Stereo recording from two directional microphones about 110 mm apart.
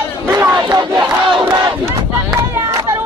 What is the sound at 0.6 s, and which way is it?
Battle cry, 40° right (ahead or behind).